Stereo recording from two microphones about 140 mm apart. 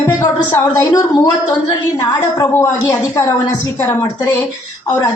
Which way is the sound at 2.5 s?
20° left (ahead or behind).